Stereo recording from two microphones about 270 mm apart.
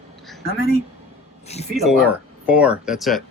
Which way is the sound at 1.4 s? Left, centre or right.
Left.